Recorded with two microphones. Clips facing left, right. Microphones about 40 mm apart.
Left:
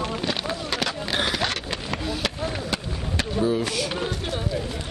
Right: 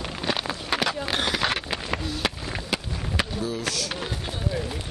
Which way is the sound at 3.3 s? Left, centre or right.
Left.